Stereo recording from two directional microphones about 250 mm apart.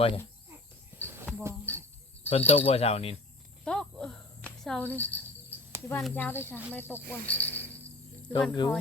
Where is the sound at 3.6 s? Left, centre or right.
Centre.